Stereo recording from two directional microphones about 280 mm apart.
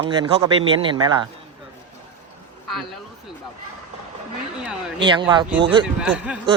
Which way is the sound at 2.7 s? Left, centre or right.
Centre.